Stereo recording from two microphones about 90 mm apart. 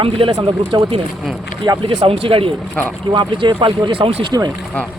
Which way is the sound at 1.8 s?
80° right.